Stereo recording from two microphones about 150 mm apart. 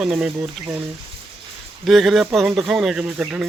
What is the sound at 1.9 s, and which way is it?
A man's voice, centre (ahead or behind).